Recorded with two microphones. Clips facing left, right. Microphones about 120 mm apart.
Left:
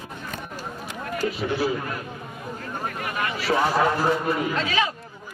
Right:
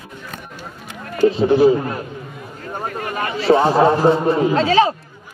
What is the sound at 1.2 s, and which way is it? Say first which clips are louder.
A man's voice: right 13 dB; 30° right (ahead or behind).